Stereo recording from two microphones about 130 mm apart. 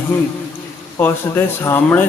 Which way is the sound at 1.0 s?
20° left (ahead or behind).